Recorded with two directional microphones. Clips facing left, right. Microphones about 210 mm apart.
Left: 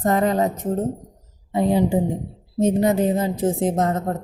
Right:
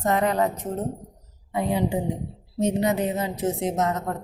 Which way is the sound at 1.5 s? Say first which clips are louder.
Left 6 dB; 35° left (ahead or behind).